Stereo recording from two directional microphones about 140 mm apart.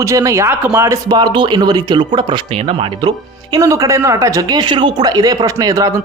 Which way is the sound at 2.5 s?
45° right (ahead or behind).